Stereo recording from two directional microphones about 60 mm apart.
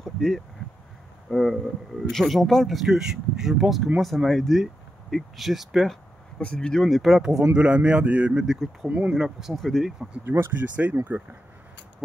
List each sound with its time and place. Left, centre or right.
0.0 s a sound: centre
1.3 s speech: centre
6.4 s speech: centre
7.5 s a man's voice: centre
9.1 s speech: centre
9.6 s speech: centre
10.2 s a man's voice: right